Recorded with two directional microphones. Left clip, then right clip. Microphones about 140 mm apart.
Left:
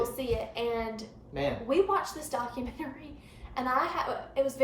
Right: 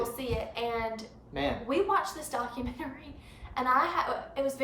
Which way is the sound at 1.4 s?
30° right (ahead or behind).